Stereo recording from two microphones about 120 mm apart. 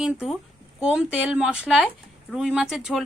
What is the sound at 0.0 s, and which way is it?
Speech, 5° right (ahead or behind).